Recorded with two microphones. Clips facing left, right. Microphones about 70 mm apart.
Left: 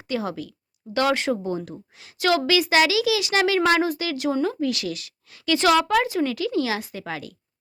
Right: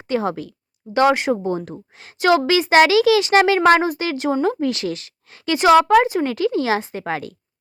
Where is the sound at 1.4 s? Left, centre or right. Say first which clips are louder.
Right 4 dB; right.